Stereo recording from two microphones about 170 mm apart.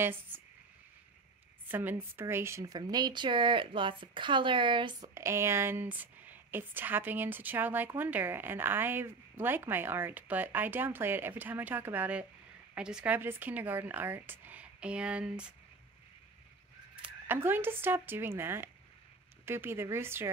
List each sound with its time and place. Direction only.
0.0 s a woman's voice: 10° right (ahead or behind)
1.7 s speech: 10° right (ahead or behind); by 5.1 s 30° right (ahead or behind)
5.1 s a woman's voice: 15° right (ahead or behind)
16.9 s a woman's voice: 10° right (ahead or behind)